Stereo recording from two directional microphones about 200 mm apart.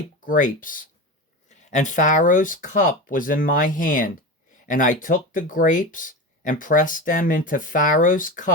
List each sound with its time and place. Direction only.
0.3 s speech: 40° left (ahead or behind)